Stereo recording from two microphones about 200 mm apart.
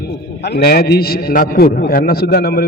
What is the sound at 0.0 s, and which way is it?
A man's voice, 55° left (ahead or behind).